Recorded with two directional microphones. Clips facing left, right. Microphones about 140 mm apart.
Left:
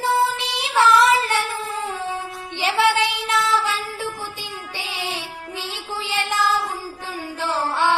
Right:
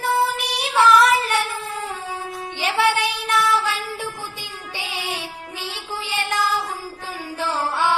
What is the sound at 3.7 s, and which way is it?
Music, 15° right (ahead or behind).